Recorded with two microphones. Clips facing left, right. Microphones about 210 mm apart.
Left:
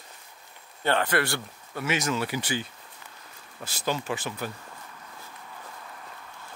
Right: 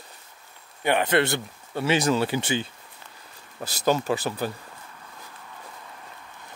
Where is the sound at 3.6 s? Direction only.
40° right (ahead or behind).